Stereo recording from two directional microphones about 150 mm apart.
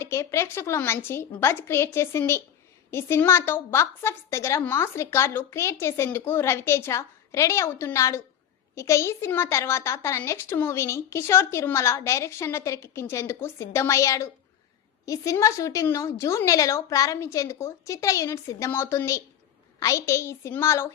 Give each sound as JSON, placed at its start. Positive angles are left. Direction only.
{"t": 0.0, "sound": "a woman's voice", "side_deg": 20}